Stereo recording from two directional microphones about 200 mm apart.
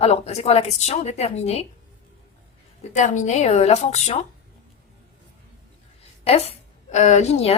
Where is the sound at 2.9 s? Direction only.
35° left (ahead or behind).